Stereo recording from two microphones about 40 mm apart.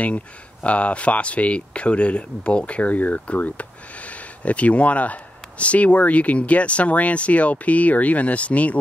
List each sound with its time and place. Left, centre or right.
0.0 s speech: left